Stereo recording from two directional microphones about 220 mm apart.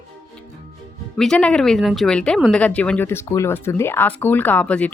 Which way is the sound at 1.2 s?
5° left (ahead or behind).